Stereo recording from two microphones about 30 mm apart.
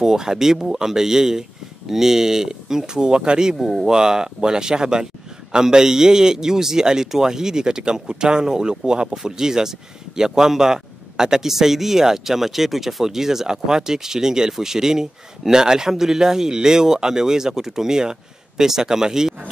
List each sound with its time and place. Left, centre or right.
0.0 s speech: centre
3.5 s speech: centre
3.8 s speech: right
9.1 s speech: centre
11.5 s speech: centre